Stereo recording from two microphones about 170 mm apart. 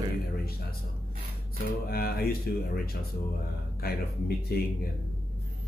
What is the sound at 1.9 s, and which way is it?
Speech, 65° left (ahead or behind).